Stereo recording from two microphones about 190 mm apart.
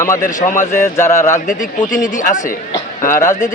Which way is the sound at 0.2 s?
40° left (ahead or behind).